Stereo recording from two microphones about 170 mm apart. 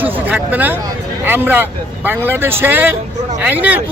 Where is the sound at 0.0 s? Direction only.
10° right (ahead or behind).